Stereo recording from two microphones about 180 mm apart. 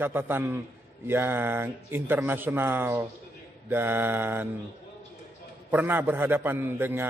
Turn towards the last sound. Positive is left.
turn(degrees=-10)  # may be behind; listen again after turning